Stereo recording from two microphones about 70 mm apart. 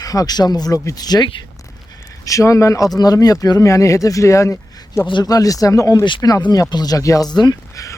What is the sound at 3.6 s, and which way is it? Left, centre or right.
Speech, left.